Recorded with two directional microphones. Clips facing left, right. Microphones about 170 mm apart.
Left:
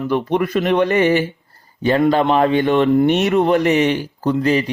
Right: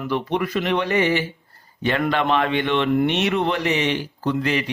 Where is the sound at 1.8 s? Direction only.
35° left (ahead or behind).